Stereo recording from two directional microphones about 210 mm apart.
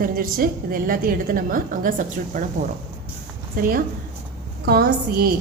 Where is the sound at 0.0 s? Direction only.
40° right (ahead or behind).